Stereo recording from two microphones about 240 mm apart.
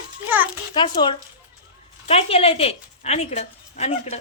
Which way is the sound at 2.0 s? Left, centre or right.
Left.